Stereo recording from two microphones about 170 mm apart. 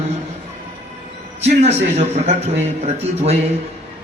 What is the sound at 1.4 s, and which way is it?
A man's voice, 40° right (ahead or behind).